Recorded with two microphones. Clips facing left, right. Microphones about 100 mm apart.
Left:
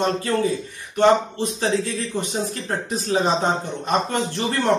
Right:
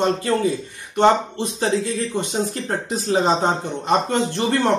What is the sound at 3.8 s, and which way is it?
Speech, 20° right (ahead or behind).